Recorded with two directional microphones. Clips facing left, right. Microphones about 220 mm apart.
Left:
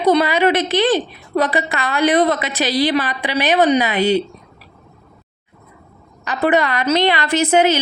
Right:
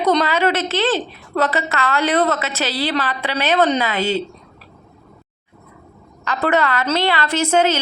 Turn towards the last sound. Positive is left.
turn(degrees=15)  # may be behind; listen again after turning